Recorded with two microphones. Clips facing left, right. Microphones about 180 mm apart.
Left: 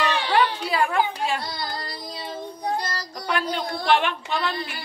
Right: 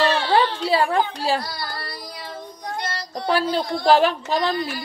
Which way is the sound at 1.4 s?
20° left (ahead or behind).